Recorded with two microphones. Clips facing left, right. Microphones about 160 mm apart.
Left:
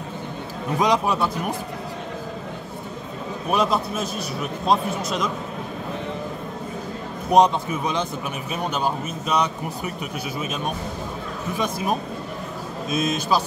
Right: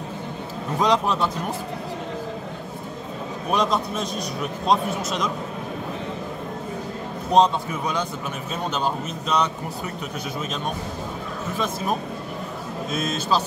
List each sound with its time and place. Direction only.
0.7 s speech: 10° left (ahead or behind)
3.4 s a man's voice: 5° left (ahead or behind)
7.2 s a man's voice: 15° left (ahead or behind)
8.7 s speech: 10° left (ahead or behind)
11.5 s speech: 15° left (ahead or behind)